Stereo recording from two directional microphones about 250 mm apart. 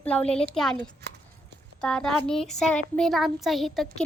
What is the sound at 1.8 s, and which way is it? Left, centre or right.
A child's voice, centre.